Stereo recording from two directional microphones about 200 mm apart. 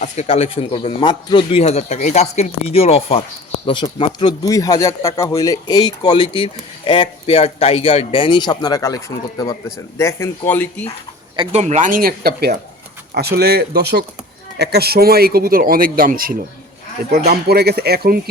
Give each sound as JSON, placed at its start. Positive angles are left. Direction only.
{"t": 0.0, "sound": "speech", "side_deg": 30}
{"t": 4.4, "sound": "speech", "side_deg": 15}
{"t": 11.3, "sound": "a man's voice", "side_deg": -35}